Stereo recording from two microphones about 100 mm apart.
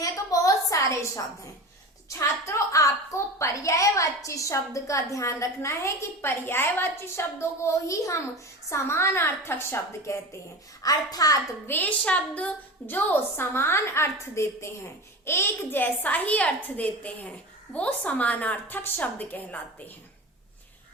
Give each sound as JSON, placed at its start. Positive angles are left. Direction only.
{"t": 0.0, "sound": "a sound", "side_deg": 35}
{"t": 2.1, "sound": "a woman's voice", "side_deg": 30}
{"t": 10.8, "sound": "a woman's voice", "side_deg": 40}
{"t": 11.6, "sound": "a woman's voice", "side_deg": 20}